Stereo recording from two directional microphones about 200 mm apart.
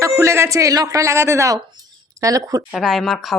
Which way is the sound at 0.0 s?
15° right (ahead or behind).